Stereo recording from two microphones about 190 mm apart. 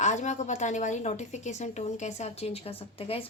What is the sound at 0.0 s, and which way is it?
A woman's voice, 40° left (ahead or behind).